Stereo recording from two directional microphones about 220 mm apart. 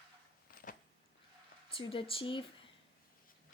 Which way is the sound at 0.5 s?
40° left (ahead or behind).